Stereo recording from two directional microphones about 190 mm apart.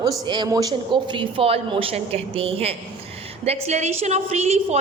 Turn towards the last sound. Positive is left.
turn(degrees=-35)  # may be behind; listen again after turning